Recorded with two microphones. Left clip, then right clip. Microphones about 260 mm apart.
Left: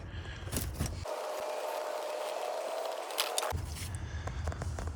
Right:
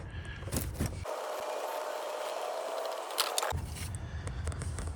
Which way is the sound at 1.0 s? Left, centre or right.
Centre.